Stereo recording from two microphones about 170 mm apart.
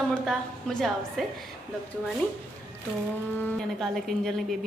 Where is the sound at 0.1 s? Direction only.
5° left (ahead or behind).